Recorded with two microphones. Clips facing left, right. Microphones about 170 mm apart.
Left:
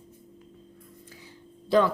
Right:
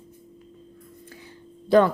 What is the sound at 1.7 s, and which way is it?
Speech, 50° right (ahead or behind).